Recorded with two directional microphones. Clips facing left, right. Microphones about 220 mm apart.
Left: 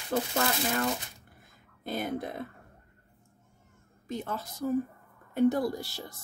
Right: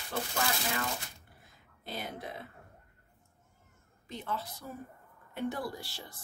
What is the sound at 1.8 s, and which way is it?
Speech, 50° left (ahead or behind).